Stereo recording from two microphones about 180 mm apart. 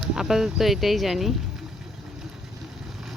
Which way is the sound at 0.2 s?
Centre (ahead or behind).